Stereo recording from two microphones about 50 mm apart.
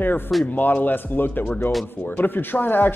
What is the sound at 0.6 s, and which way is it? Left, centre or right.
Speech, left.